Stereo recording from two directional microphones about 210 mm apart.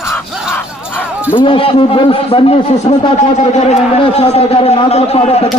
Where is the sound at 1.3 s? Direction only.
25° left (ahead or behind).